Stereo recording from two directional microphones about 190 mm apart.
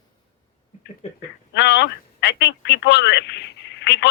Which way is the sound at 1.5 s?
65° left (ahead or behind).